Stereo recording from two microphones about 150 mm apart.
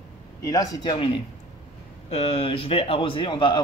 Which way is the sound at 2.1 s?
40° left (ahead or behind).